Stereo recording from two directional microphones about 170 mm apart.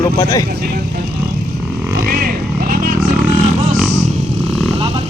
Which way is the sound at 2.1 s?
60° right (ahead or behind).